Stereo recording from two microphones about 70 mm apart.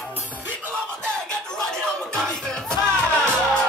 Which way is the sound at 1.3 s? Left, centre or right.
Centre.